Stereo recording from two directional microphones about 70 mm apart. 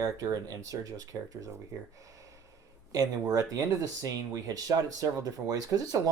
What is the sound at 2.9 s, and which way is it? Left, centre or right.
Speech, right.